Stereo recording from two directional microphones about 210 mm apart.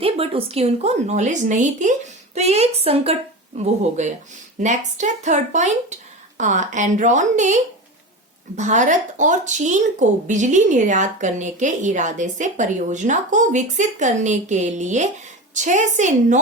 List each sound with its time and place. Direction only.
0.0 s a woman's voice: 25° right (ahead or behind)